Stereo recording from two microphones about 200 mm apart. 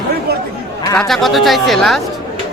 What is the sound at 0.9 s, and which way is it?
Speech, 5° left (ahead or behind).